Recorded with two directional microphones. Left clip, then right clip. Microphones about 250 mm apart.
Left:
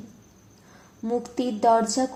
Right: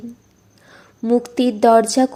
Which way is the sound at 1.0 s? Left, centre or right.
Right.